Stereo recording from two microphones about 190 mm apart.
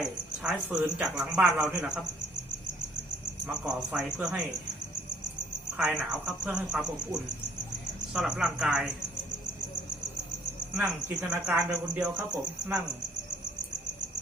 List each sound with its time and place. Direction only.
0.0 s a man's voice: 5° right (ahead or behind)
3.4 s a man's voice: 5° right (ahead or behind)
6.0 s a man's voice: 5° right (ahead or behind)
10.8 s a man's voice: 5° right (ahead or behind)